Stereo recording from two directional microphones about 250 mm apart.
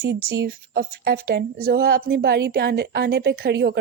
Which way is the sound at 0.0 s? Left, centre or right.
Right.